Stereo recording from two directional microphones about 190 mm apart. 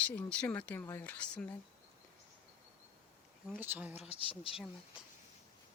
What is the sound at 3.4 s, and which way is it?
Speech, 10° right (ahead or behind).